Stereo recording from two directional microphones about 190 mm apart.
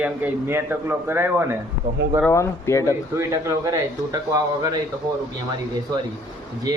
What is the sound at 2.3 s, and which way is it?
Speech, 15° left (ahead or behind).